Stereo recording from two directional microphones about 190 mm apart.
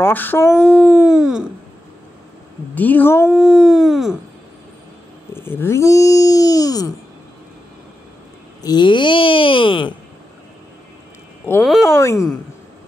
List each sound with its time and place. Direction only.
0.0 s speech: 10° left (ahead or behind)
0.5 s a sound: 5° right (ahead or behind)
2.7 s speech: 10° left (ahead or behind)
3.3 s a sound: centre (ahead or behind)
5.3 s speech: 10° left (ahead or behind)
8.6 s speech: 25° left (ahead or behind)
11.9 s speech: 15° left (ahead or behind)